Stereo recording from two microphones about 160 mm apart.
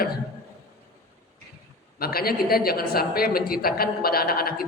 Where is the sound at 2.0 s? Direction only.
70° left (ahead or behind).